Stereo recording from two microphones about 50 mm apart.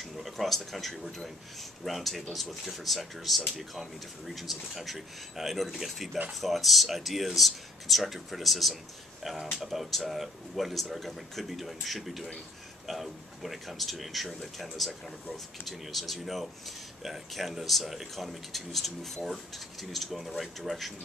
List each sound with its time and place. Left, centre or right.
0.0 s speech: centre